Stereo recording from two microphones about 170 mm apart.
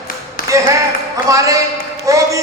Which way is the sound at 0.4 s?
55° left (ahead or behind).